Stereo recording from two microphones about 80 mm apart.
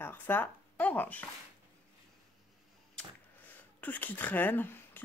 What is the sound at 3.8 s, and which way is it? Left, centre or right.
Speech, left.